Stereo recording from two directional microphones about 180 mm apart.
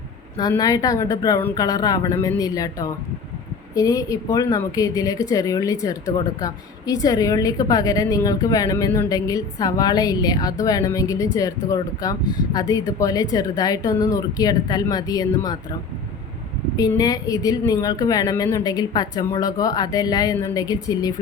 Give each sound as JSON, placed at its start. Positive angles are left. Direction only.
{"t": 0.3, "sound": "speech", "side_deg": 20}
{"t": 16.7, "sound": "speech", "side_deg": 20}